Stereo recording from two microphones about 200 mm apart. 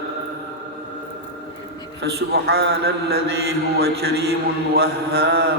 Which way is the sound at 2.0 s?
55° right (ahead or behind).